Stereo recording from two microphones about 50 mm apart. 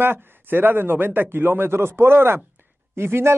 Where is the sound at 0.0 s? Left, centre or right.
Right.